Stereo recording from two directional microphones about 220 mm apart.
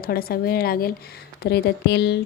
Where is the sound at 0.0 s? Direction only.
45° left (ahead or behind).